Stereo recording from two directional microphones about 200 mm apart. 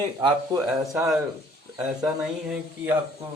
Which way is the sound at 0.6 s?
10° right (ahead or behind).